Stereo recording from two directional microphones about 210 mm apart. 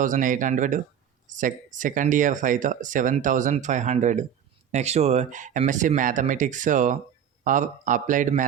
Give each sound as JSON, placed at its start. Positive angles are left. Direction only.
{"t": 0.0, "sound": "speech", "side_deg": -40}